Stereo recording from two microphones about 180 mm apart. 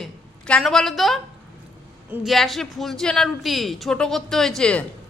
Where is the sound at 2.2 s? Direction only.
Centre (ahead or behind).